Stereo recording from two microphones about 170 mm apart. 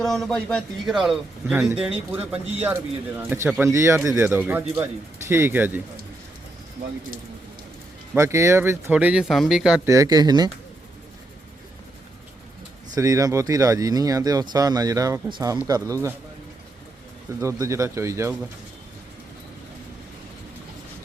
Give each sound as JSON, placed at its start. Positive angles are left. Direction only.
{"t": 0.0, "sound": "speech", "side_deg": 0}
{"t": 8.1, "sound": "speech", "side_deg": -15}
{"t": 9.8, "sound": "speech", "side_deg": -20}
{"t": 12.9, "sound": "speech", "side_deg": -20}
{"t": 17.4, "sound": "speech", "side_deg": -15}